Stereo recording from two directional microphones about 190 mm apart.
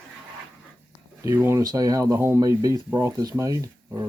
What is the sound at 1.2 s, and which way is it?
Speech, 15° right (ahead or behind).